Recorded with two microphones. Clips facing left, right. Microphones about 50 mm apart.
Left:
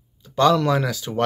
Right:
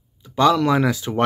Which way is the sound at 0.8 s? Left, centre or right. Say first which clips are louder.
Right 5 dB; right.